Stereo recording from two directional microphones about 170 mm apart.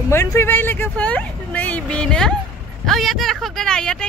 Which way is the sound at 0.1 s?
15° left (ahead or behind).